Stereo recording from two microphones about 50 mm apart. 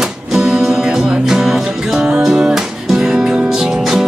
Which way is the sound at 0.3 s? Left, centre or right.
Centre.